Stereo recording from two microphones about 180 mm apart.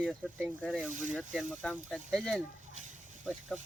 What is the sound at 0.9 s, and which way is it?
Speech, 45° right (ahead or behind).